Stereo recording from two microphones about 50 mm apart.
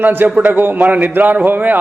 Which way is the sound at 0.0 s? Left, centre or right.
Right.